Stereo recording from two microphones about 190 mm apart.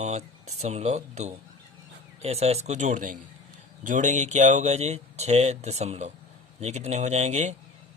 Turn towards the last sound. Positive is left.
turn(degrees=-40)  # may be behind; listen again after turning